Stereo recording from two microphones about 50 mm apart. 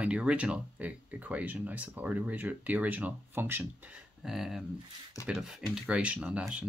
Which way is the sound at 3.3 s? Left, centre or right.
Right.